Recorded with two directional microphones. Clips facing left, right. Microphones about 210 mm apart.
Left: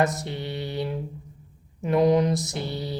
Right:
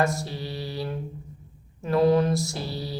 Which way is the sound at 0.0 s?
20° left (ahead or behind).